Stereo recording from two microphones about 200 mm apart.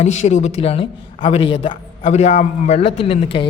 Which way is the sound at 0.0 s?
35° left (ahead or behind).